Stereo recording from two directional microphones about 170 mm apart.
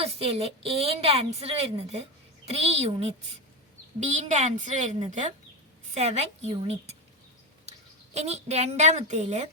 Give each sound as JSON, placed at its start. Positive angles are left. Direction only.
{"t": 0.0, "sound": "a woman's voice", "side_deg": -35}